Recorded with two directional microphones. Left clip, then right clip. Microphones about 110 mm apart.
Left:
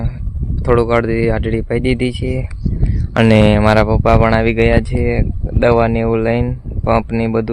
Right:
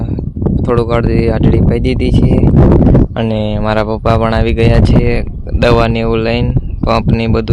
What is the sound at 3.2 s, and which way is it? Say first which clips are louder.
Speech: left 5 dB; 40° left (ahead or behind).